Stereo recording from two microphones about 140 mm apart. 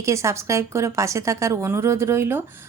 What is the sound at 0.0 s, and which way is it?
A woman's voice, 20° right (ahead or behind).